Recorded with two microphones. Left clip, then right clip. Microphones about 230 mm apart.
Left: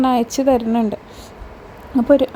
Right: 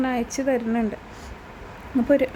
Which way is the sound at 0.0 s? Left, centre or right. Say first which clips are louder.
Left 8 dB; left.